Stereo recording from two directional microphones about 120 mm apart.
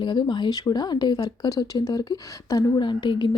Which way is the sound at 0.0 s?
40° left (ahead or behind).